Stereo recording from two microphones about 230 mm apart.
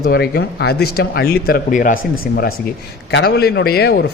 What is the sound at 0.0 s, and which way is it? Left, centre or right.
A man's voice, left.